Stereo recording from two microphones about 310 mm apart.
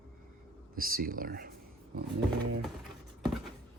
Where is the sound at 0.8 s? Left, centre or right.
Right.